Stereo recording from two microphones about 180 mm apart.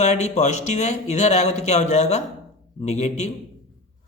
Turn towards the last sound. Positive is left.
turn(degrees=40)  # may be behind; listen again after turning